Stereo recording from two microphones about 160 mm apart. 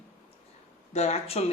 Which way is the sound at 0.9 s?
45° left (ahead or behind).